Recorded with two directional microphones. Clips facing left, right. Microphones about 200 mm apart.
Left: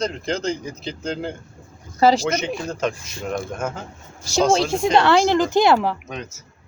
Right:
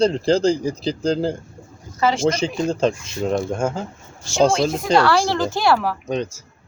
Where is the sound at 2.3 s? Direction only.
30° right (ahead or behind).